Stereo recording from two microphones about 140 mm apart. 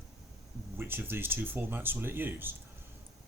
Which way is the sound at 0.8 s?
15° right (ahead or behind).